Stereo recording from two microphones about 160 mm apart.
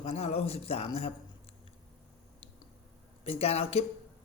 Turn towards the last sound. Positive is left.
turn(degrees=40)  # may be behind; listen again after turning